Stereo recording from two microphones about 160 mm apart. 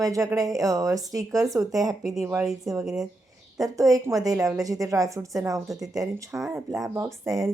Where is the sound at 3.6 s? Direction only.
20° right (ahead or behind).